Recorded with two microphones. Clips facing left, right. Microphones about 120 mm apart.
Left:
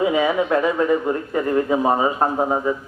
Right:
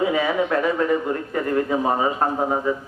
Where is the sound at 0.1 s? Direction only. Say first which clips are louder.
Left 2 dB; 20° left (ahead or behind).